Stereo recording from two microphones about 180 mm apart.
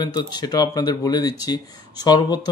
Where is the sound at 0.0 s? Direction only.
25° left (ahead or behind).